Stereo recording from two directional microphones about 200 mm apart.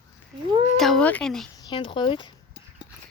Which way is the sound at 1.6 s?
25° left (ahead or behind).